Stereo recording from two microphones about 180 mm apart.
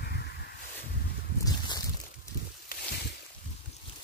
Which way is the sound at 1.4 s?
20° left (ahead or behind).